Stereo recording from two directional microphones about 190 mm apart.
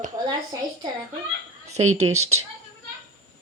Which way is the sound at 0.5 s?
15° right (ahead or behind).